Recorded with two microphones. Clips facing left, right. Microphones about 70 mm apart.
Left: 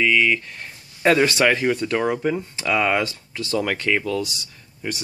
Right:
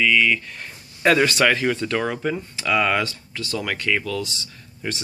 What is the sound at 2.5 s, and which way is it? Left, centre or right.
Speech, left.